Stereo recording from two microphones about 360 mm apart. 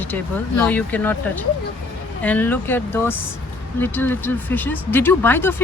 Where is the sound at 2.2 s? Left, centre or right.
Centre.